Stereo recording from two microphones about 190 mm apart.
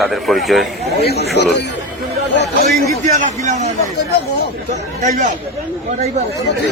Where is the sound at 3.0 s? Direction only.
40° right (ahead or behind).